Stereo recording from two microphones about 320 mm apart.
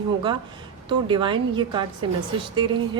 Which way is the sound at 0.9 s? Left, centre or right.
Centre.